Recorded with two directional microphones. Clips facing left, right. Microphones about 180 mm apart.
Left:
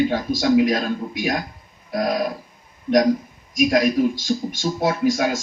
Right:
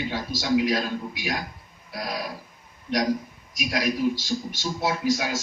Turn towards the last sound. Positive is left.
turn(degrees=50)  # may be behind; listen again after turning